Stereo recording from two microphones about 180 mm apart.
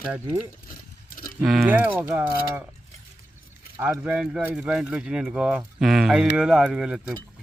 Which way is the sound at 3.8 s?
5° right (ahead or behind).